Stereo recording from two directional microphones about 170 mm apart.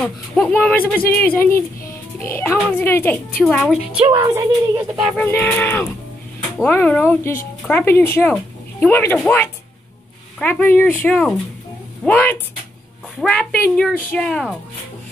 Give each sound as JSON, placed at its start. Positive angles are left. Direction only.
{"t": 0.0, "sound": "speech", "side_deg": 5}
{"t": 4.1, "sound": "speech", "side_deg": -15}
{"t": 5.4, "sound": "speech", "side_deg": 10}
{"t": 10.4, "sound": "a woman's voice", "side_deg": 10}